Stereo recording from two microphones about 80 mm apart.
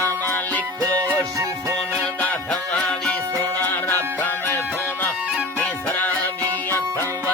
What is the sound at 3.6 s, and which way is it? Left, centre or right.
Music, left.